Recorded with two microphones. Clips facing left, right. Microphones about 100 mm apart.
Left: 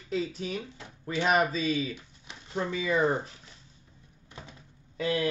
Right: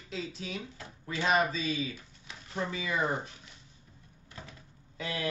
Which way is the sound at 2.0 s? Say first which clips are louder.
Left 1 dB; 25° left (ahead or behind).